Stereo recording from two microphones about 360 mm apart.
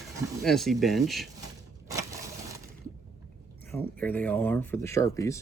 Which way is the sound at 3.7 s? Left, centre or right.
Centre.